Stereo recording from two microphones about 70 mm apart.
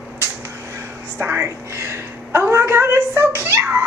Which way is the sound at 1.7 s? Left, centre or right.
Right.